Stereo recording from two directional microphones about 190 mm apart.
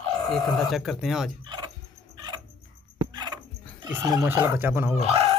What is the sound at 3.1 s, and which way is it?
Dog, 25° right (ahead or behind).